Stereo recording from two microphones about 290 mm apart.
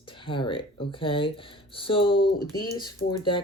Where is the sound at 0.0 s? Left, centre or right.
Centre.